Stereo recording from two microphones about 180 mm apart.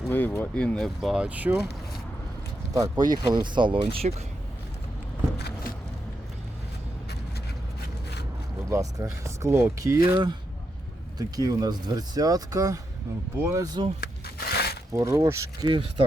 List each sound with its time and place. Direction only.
0.1 s speech: 10° left (ahead or behind); by 1.6 s 10° right (ahead or behind)
2.7 s speech: 20° right (ahead or behind)
5.4 s a sound: 65° left (ahead or behind)
8.7 s speech: 20° right (ahead or behind)
11.2 s speech: 20° right (ahead or behind)
14.0 s a sound: 60° left (ahead or behind)
14.9 s speech: 15° right (ahead or behind)